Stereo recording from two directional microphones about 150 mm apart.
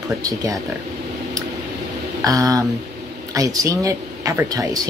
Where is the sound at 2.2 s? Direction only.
25° right (ahead or behind).